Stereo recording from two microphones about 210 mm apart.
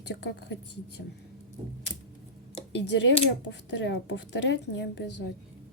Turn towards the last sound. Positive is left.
turn(degrees=55)  # may be behind; listen again after turning